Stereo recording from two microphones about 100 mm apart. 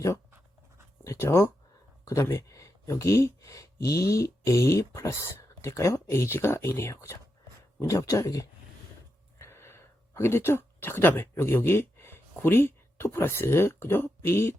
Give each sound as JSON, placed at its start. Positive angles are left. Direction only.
{"t": 1.0, "sound": "speech", "side_deg": 30}